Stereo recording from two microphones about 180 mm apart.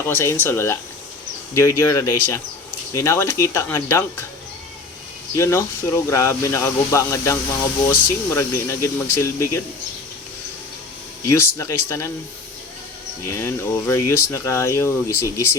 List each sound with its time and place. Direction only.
0.1 s speech: 10° left (ahead or behind)
5.4 s speech: 15° left (ahead or behind)
11.3 s speech: 15° left (ahead or behind)
13.3 s speech: 15° left (ahead or behind)